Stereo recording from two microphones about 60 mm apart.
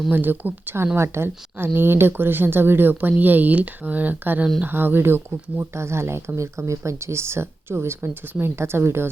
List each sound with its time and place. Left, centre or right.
0.1 s a woman's voice: right
0.9 s a woman's voice: right